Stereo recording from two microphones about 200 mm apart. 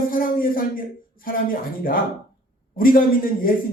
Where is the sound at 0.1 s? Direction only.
45° left (ahead or behind).